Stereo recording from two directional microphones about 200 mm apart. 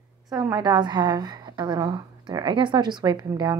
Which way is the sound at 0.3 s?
20° right (ahead or behind).